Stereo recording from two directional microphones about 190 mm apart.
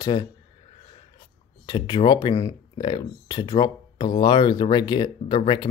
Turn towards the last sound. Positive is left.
turn(degrees=25)  # may be behind; listen again after turning